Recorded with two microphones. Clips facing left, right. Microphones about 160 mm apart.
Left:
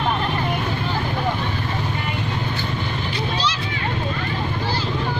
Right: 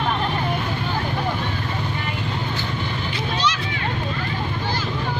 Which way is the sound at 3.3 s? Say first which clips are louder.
Right 4 dB; 30° left (ahead or behind).